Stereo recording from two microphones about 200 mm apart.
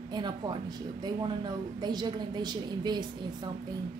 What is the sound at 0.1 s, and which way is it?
A woman's voice, 20° right (ahead or behind).